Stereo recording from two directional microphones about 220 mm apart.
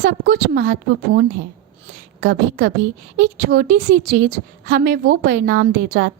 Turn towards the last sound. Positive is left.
turn(degrees=-50)  # may be behind; listen again after turning